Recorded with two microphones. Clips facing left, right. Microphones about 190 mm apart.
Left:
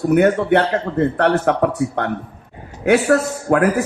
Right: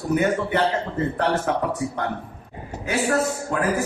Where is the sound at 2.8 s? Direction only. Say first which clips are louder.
Left 7 dB; 70° left (ahead or behind).